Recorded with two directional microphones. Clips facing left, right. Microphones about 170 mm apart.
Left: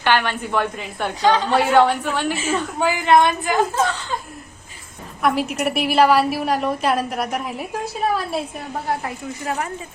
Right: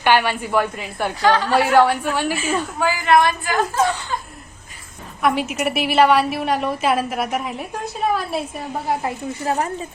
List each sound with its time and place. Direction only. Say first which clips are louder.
0.0 s a woman's voice: right 2 dB; 10° right (ahead or behind)
1.2 s a woman's voice: even; 20° left (ahead or behind)
1.5 s a woman's voice: right 1 dB; 5° right (ahead or behind)
2.7 s a woman's voice: left 1 dB; 25° left (ahead or behind)
5.2 s a woman's voice: even; centre (ahead or behind)
8.9 s speech: right 2 dB; 20° right (ahead or behind)
9.4 s speech: right 4 dB; 35° right (ahead or behind)